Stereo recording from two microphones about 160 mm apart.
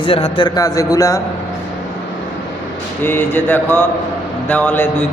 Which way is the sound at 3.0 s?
10° left (ahead or behind).